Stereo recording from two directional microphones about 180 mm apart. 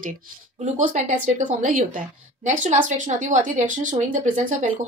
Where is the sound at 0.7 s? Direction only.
45° right (ahead or behind).